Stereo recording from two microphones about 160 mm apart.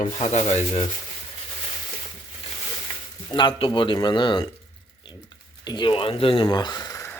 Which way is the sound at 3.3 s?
30° left (ahead or behind).